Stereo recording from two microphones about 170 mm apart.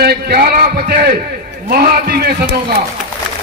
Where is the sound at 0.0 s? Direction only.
65° right (ahead or behind).